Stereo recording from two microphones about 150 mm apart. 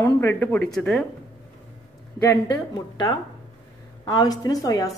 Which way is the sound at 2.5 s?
25° left (ahead or behind).